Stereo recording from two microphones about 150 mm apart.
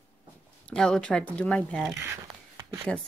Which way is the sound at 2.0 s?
20° right (ahead or behind).